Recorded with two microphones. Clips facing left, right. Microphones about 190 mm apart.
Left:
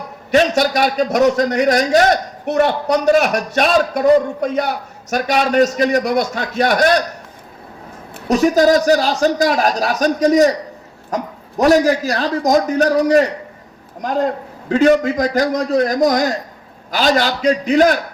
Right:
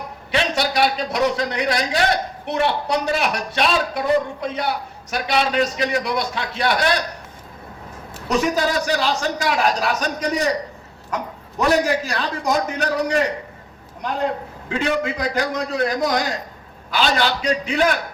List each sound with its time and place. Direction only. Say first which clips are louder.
0.3 s a man's voice: left 8 dB; 45° left (ahead or behind)
8.3 s a man's voice: left 8 dB; 40° left (ahead or behind)